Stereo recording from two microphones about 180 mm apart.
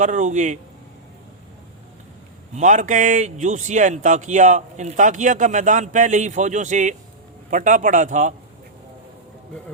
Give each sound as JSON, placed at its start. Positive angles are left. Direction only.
{"t": 0.0, "sound": "a man's voice", "side_deg": -45}
{"t": 2.6, "sound": "a man's voice", "side_deg": -45}